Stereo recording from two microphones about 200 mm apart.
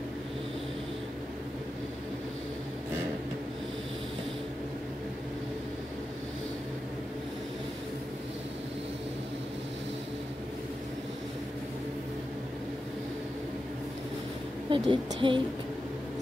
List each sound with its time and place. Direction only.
14.7 s a woman's voice: 25° right (ahead or behind)